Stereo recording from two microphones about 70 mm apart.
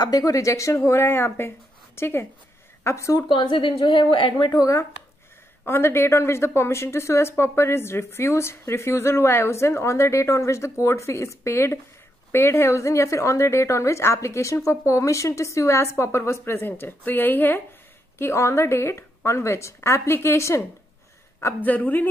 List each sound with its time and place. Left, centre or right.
0.0 s a woman's voice: left
2.8 s a woman's voice: left
4.0 s a woman's voice: left
5.7 s a woman's voice: left
18.1 s a woman's voice: left
21.5 s a woman's voice: left